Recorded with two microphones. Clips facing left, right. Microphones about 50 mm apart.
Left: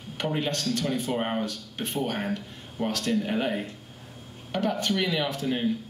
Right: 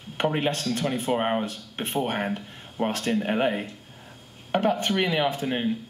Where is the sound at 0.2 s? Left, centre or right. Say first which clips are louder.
Right 3 dB; right.